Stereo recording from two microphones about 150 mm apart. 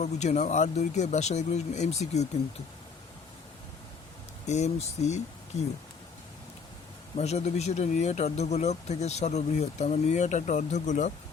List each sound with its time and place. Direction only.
0.0 s speech: 50° left (ahead or behind)
4.4 s speech: 50° left (ahead or behind)
7.2 s speech: 45° left (ahead or behind)